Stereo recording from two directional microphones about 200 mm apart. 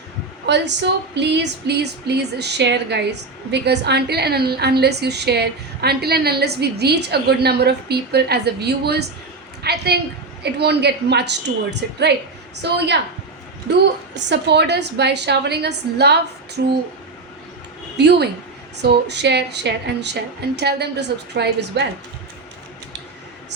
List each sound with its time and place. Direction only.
0.4 s speech: 60° right (ahead or behind)
12.6 s speech: 55° right (ahead or behind)
14.3 s speech: 55° right (ahead or behind)
17.9 s speech: 55° right (ahead or behind)